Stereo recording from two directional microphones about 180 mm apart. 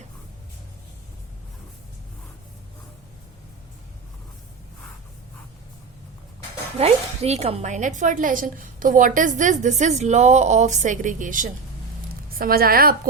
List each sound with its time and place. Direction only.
6.7 s a woman's voice: 35° right (ahead or behind); by 13.0 s 55° right (ahead or behind)